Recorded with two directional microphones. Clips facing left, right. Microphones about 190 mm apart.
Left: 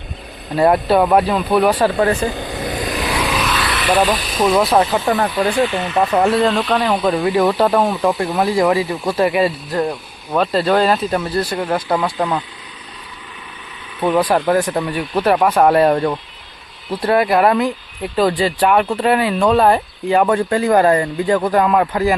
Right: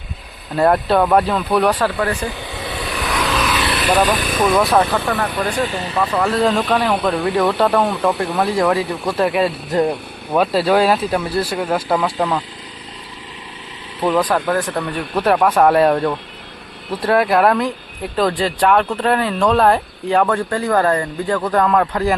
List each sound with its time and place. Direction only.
0.5 s speech: 5° left (ahead or behind)
2.0 s speech: 20° left (ahead or behind)
2.3 s vehicle: 45° left (ahead or behind)
3.1 s vehicle: 15° left (ahead or behind)
4.6 s speech: 15° left (ahead or behind)
5.6 s speech: 35° right (ahead or behind)
6.0 s speech: 35° left (ahead or behind)
6.3 s speech: centre (ahead or behind)
9.7 s speech: 20° right (ahead or behind)
10.3 s speech: 5° right (ahead or behind)
14.0 s speech: 5° left (ahead or behind)
14.3 s speech: 15° left (ahead or behind)
20.2 s speech: 15° left (ahead or behind)